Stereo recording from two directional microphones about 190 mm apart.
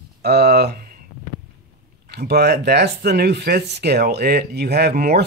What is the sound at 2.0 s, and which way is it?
Speech, 60° right (ahead or behind).